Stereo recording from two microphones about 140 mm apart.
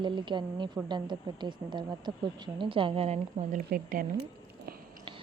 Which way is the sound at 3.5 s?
80° right.